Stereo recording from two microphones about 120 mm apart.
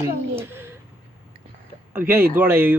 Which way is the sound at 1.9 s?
20° right (ahead or behind).